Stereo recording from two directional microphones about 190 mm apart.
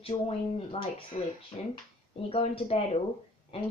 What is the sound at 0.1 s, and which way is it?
Speech, 30° left (ahead or behind).